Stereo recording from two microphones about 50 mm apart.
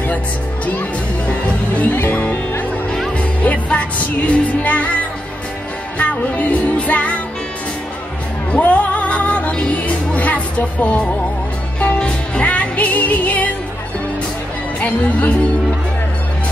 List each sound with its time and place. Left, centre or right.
1.8 s music: left
3.2 s music: left
5.9 s music: left
8.5 s music: left
14.8 s speech: left